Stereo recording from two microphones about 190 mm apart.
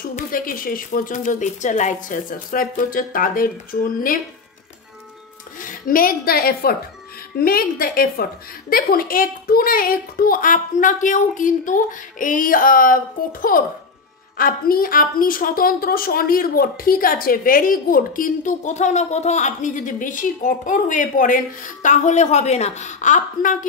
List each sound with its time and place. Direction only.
0.0 s a woman's voice: 50° left (ahead or behind)
5.6 s a woman's voice: 45° left (ahead or behind)